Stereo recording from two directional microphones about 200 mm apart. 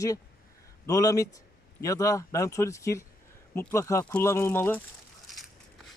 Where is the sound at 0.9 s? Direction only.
15° left (ahead or behind).